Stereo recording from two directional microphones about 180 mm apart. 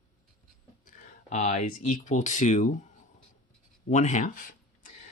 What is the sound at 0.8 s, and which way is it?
Speech, 45° left (ahead or behind).